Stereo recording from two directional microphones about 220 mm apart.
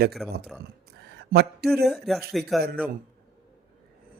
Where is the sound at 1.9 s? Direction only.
Centre (ahead or behind).